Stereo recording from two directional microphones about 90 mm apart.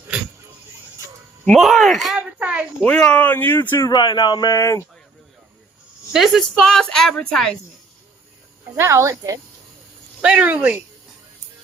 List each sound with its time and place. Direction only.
1.5 s speech: centre (ahead or behind)
2.1 s a sound: 15° right (ahead or behind)
2.8 s speech: 10° left (ahead or behind)
3.9 s speech: 55° left (ahead or behind)
6.1 s speech: 5° right (ahead or behind)
8.7 s speech: 30° right (ahead or behind)
10.2 s speech: 10° right (ahead or behind)